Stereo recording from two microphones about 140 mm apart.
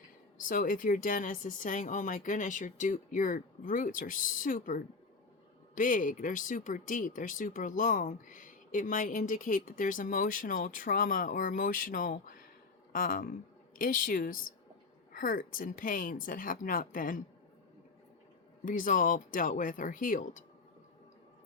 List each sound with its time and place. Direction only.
0.3 s speech: 75° left (ahead or behind)
12.9 s speech: 90° left
13.7 s speech: 80° left
18.6 s speech: 75° left (ahead or behind)